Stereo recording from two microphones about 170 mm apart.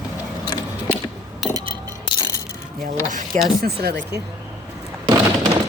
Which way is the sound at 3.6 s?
70° right (ahead or behind).